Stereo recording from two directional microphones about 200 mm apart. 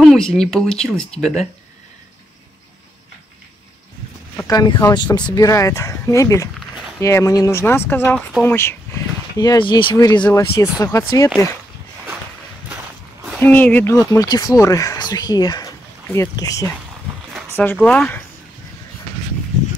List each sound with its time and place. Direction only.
0.0 s speech: centre (ahead or behind)
4.4 s speech: 20° left (ahead or behind)
13.4 s speech: 10° left (ahead or behind)